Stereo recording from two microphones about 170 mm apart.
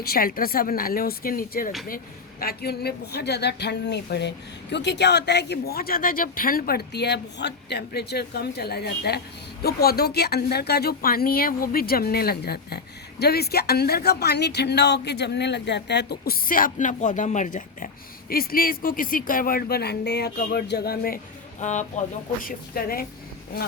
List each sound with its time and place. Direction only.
0.0 s speech: 60° left (ahead or behind)
2.4 s speech: 65° left (ahead or behind)
21.6 s speech: 45° left (ahead or behind)